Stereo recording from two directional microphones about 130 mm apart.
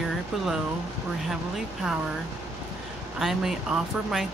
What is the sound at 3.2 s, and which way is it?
Speech, 5° right (ahead or behind).